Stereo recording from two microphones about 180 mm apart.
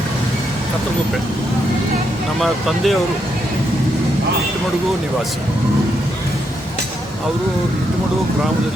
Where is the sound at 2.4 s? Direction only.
Centre (ahead or behind).